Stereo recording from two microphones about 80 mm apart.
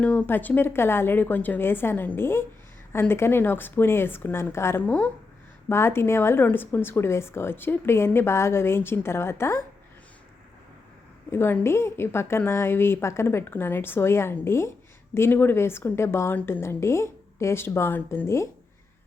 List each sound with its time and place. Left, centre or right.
0.0 s a woman's voice: centre; by 4.8 s left
4.8 s a woman's voice: centre
5.6 s a woman's voice: left
11.3 s a woman's voice: left